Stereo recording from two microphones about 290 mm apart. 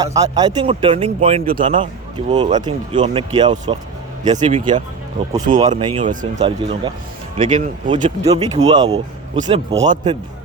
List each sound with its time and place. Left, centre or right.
0.0 s speech: centre
6.0 s a man's voice: right
8.5 s a man's voice: centre